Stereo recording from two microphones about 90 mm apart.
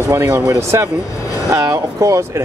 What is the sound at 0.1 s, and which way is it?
Speech, 30° right (ahead or behind).